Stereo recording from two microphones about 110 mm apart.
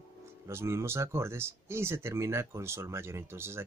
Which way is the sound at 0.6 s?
25° right (ahead or behind).